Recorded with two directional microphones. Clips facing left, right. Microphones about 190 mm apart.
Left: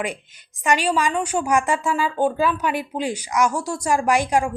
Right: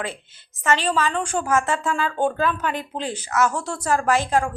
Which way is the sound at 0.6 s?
10° left (ahead or behind).